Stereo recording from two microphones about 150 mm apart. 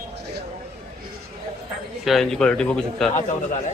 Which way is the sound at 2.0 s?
Centre (ahead or behind).